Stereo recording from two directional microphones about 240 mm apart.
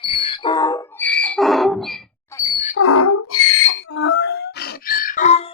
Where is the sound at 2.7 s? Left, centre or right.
Left.